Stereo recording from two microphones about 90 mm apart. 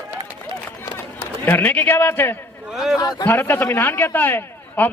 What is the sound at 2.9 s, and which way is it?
Speech, 45° left (ahead or behind).